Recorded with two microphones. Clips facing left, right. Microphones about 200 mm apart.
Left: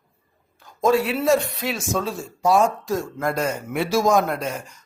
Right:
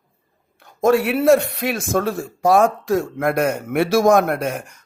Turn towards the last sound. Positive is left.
turn(degrees=-60)  # may be behind; listen again after turning